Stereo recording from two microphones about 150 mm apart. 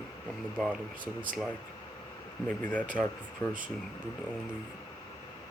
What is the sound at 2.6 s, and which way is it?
Speech, 10° left (ahead or behind).